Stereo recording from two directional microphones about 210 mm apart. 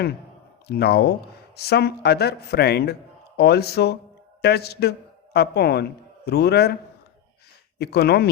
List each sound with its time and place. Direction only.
0.7 s a man's voice: 50° left (ahead or behind)
7.8 s a man's voice: 50° left (ahead or behind)